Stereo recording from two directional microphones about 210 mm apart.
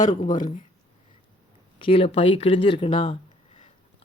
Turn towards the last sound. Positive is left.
turn(degrees=25)  # may be behind; listen again after turning